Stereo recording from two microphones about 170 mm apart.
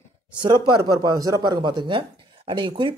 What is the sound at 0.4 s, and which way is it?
A man's voice, 25° right (ahead or behind).